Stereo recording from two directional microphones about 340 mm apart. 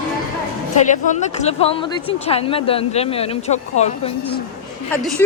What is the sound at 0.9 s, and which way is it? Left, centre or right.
Speech, left.